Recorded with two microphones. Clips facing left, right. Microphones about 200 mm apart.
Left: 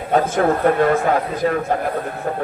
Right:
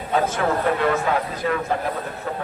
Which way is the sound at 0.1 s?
50° left (ahead or behind).